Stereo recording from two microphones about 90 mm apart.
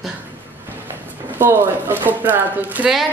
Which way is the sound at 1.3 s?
25° right (ahead or behind).